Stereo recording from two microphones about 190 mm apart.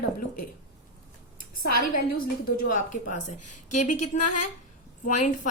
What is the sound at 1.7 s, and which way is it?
A woman's voice, 50° left (ahead or behind).